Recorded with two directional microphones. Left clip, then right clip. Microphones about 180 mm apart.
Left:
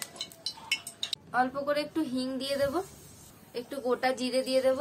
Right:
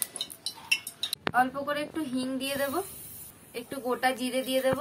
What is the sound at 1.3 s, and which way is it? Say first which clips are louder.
A woman's voice: right 1 dB; 20° left (ahead or behind).